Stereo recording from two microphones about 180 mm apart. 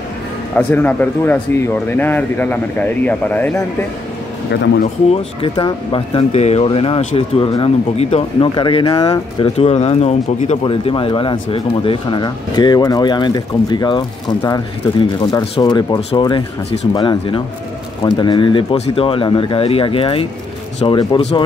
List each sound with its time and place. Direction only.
0.6 s a man's voice: 10° left (ahead or behind)
5.4 s speech: 25° left (ahead or behind)